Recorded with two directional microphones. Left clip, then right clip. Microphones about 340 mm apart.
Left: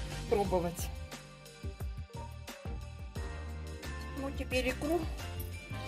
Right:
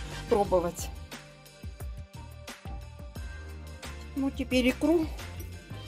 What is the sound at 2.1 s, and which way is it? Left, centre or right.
Music, centre.